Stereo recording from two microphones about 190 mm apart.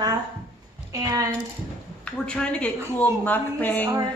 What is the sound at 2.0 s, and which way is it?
Speech, 5° left (ahead or behind).